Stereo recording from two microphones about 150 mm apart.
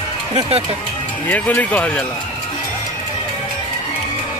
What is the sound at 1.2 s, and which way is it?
Speech, 10° left (ahead or behind).